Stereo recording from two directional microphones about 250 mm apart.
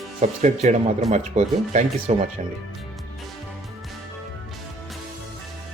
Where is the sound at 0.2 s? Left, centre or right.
Right.